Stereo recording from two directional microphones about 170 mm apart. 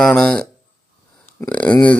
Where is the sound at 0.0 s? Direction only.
5° left (ahead or behind).